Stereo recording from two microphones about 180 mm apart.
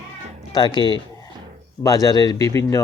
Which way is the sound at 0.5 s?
25° left (ahead or behind).